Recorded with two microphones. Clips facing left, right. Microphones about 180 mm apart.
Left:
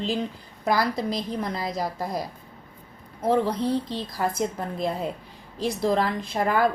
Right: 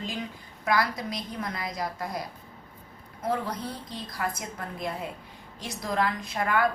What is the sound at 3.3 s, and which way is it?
A woman's voice, 30° left (ahead or behind).